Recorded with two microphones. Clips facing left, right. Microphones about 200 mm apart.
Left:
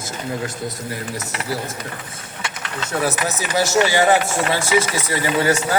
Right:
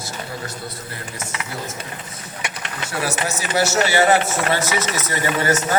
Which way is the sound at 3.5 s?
15° left (ahead or behind).